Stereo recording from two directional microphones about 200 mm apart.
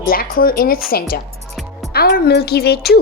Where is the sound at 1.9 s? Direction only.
50° left (ahead or behind).